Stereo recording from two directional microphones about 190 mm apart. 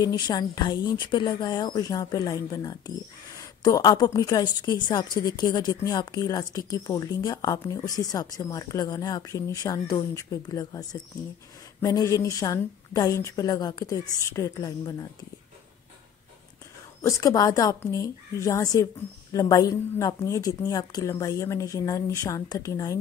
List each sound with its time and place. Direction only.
0.0 s a woman's voice: 20° left (ahead or behind)
17.0 s a woman's voice: 20° left (ahead or behind)